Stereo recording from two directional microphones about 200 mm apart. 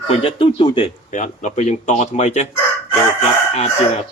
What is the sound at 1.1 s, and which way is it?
Speech, 35° left (ahead or behind).